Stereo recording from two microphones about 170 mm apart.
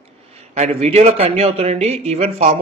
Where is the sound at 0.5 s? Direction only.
40° right (ahead or behind).